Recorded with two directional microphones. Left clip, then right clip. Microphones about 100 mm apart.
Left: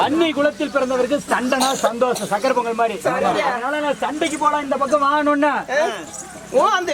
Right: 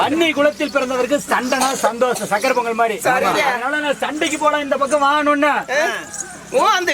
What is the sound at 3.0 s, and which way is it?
Speech, 25° right (ahead or behind).